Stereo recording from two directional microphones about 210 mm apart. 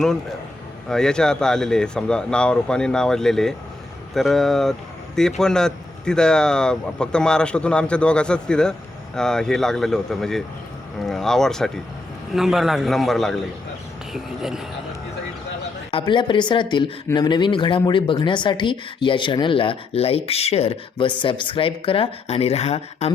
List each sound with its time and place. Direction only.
0.9 s speech: 5° left (ahead or behind)
15.9 s speech: 25° left (ahead or behind)